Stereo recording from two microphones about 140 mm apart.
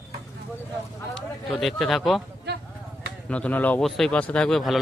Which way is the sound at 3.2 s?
10° left (ahead or behind).